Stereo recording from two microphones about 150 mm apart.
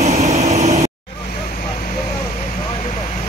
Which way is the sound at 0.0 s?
45° right (ahead or behind).